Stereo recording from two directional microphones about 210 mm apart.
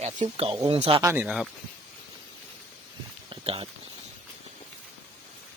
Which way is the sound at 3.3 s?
25° right (ahead or behind).